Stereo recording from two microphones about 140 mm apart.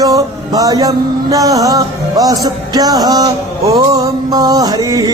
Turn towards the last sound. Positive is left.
turn(degrees=-25)  # may be behind; listen again after turning